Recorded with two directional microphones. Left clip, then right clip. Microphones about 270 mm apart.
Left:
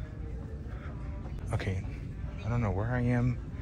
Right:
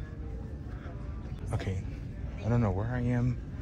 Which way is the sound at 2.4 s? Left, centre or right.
Right.